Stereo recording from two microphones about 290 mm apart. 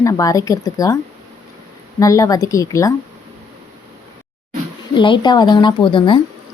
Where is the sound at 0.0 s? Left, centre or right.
Centre.